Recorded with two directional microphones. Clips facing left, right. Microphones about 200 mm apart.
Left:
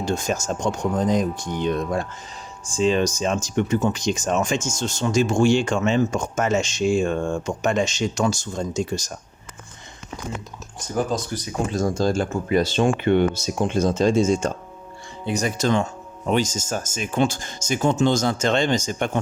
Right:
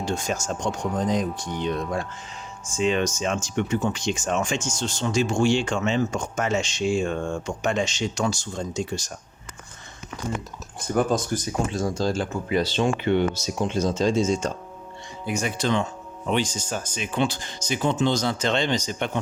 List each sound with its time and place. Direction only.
0.3 s speech: 45° left (ahead or behind)
2.7 s speech: 35° left (ahead or behind)
10.8 s speech: 55° right (ahead or behind)
11.7 s speech: 45° left (ahead or behind)
15.2 s speech: 35° left (ahead or behind)